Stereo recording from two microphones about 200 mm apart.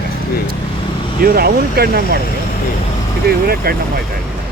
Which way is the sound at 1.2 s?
50° right (ahead or behind).